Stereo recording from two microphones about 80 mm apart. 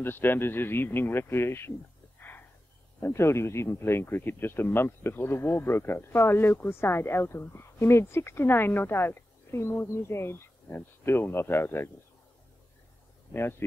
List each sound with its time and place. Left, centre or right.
0.0 s speech: left
3.0 s speech: left
13.3 s speech: left